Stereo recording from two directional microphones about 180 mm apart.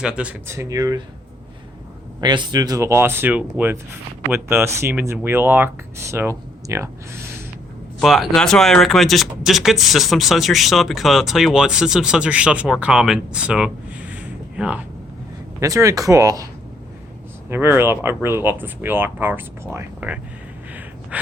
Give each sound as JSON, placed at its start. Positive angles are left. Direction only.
{"t": 0.0, "sound": "speech", "side_deg": -5}
{"t": 2.2, "sound": "speech", "side_deg": -25}
{"t": 7.9, "sound": "speech", "side_deg": 0}
{"t": 15.6, "sound": "speech", "side_deg": -15}
{"t": 17.5, "sound": "speech", "side_deg": -15}
{"t": 21.1, "sound": "a sound", "side_deg": -10}